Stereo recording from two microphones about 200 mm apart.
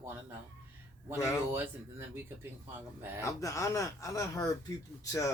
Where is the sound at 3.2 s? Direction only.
15° left (ahead or behind).